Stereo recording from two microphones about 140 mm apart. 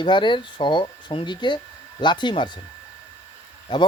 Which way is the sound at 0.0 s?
35° left (ahead or behind).